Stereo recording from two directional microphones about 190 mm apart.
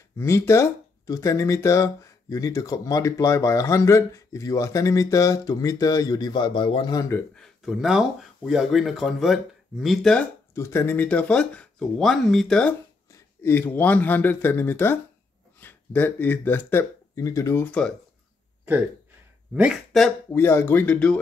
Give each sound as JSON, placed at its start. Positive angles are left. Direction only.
{"t": 0.2, "sound": "speech", "side_deg": 15}
{"t": 7.3, "sound": "speech", "side_deg": 0}
{"t": 10.5, "sound": "speech", "side_deg": 15}
{"t": 19.5, "sound": "speech", "side_deg": -5}
{"t": 20.3, "sound": "speech", "side_deg": 10}